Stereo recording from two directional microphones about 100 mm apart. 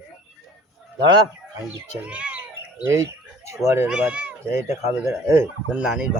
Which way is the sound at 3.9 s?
10° right (ahead or behind).